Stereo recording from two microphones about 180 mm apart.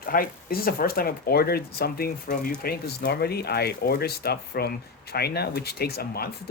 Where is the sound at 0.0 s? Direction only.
55° left (ahead or behind).